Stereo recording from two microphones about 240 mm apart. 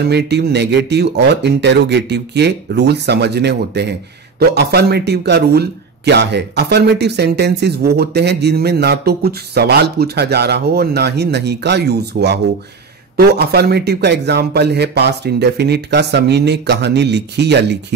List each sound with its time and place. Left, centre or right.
0.0 s speech: right